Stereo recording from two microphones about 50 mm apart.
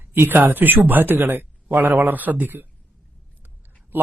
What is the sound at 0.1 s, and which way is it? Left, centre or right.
Speech, right.